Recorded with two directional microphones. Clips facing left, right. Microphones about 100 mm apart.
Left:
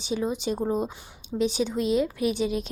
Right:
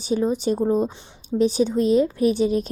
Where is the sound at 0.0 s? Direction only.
40° right (ahead or behind).